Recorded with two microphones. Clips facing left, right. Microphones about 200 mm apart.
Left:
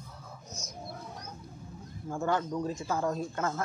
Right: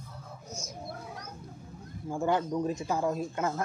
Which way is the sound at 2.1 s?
15° right (ahead or behind).